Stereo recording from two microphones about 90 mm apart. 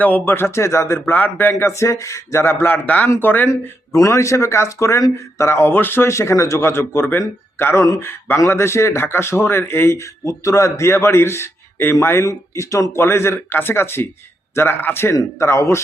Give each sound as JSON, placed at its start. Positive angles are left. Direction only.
{"t": 0.0, "sound": "speech", "side_deg": 20}
{"t": 3.5, "sound": "a man's voice", "side_deg": 35}